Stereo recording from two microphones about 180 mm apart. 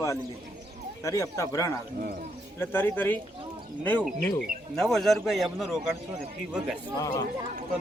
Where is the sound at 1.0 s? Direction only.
15° left (ahead or behind).